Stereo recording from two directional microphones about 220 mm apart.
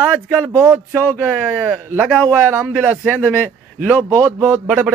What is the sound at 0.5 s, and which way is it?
Speech, 15° right (ahead or behind).